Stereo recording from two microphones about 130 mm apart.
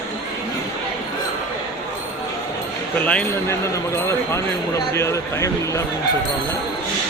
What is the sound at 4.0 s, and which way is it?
Speech, 20° left (ahead or behind).